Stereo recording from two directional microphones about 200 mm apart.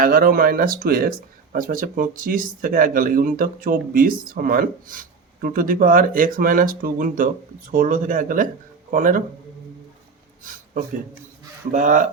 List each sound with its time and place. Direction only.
0.0 s speech: 45° right (ahead or behind)
10.4 s a sound: 40° right (ahead or behind)
11.7 s speech: 40° right (ahead or behind)